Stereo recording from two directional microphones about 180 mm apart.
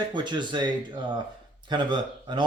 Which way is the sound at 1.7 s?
25° right (ahead or behind).